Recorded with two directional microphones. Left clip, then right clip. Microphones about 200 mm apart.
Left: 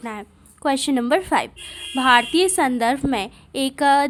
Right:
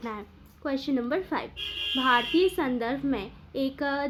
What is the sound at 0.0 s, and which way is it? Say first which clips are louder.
Speech: left 5 dB; 30° left (ahead or behind).